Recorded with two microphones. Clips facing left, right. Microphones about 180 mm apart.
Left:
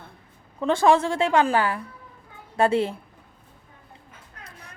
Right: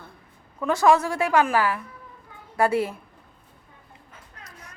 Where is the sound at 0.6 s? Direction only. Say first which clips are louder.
Even; 30° left (ahead or behind).